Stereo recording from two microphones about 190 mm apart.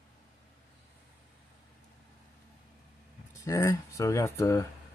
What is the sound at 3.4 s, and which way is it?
Speech, 15° left (ahead or behind).